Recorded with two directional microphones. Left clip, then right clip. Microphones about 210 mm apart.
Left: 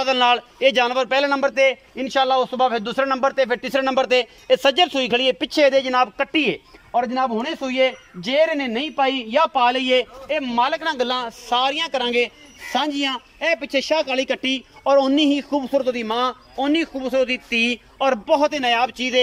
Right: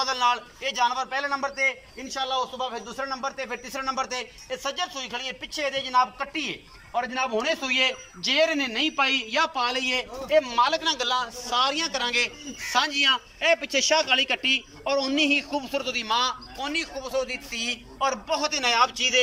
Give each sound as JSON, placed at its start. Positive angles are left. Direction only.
{"t": 0.0, "sound": "a man's voice", "side_deg": 45}